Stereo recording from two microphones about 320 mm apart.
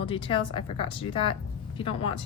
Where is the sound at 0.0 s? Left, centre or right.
Centre.